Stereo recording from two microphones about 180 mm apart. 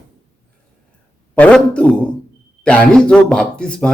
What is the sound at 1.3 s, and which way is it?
A man's voice, 5° left (ahead or behind).